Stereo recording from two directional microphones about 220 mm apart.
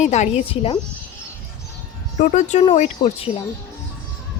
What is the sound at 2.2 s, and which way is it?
Speech, 35° left (ahead or behind).